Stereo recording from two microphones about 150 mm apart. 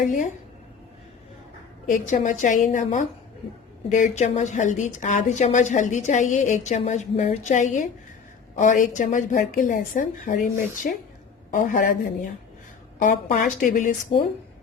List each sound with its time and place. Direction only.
1.9 s a woman's voice: 60° left (ahead or behind)